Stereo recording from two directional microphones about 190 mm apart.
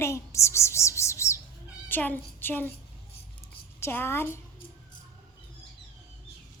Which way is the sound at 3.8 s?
15° left (ahead or behind).